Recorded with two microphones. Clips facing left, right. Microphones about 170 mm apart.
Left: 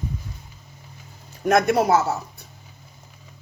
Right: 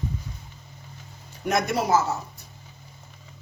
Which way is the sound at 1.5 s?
55° left (ahead or behind).